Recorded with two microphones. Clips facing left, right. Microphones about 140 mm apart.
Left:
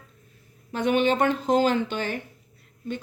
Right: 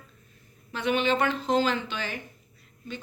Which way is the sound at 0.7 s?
50° left (ahead or behind).